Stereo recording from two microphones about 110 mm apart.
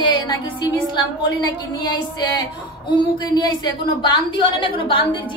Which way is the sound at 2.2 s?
45° left (ahead or behind).